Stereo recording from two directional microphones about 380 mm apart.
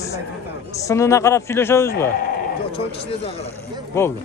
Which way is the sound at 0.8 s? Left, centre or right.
Centre.